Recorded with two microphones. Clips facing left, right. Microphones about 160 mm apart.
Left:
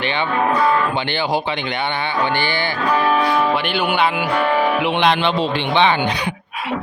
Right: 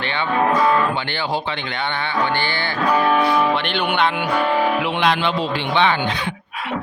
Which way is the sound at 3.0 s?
Centre (ahead or behind).